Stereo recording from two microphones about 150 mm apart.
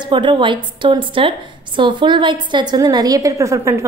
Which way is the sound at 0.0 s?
30° right (ahead or behind).